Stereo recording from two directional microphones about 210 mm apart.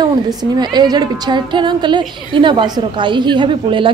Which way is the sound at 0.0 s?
20° right (ahead or behind).